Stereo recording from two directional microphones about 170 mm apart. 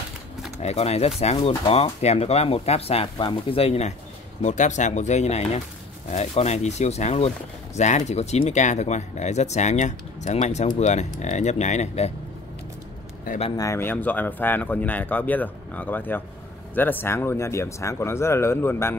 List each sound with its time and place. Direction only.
0.6 s speech: 40° left (ahead or behind)
13.3 s speech: 55° left (ahead or behind)
13.6 s speech: 15° left (ahead or behind)